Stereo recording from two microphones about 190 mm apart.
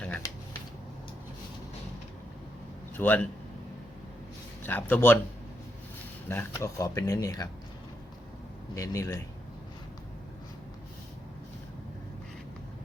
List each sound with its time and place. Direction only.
0.0 s a sound: 5° left (ahead or behind)
3.0 s speech: 10° left (ahead or behind)
4.6 s speech: 10° left (ahead or behind)
6.2 s speech: 15° left (ahead or behind)
8.7 s speech: 15° left (ahead or behind)